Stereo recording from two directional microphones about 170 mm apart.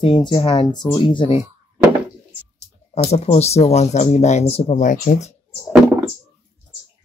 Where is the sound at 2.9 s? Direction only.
40° left (ahead or behind).